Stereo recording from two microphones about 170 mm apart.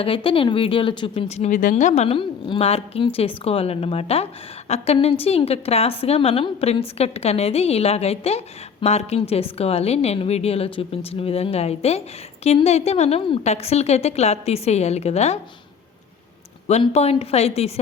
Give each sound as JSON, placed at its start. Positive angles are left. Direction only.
{"t": 0.0, "sound": "a woman's voice", "side_deg": 30}
{"t": 16.6, "sound": "a woman's voice", "side_deg": 40}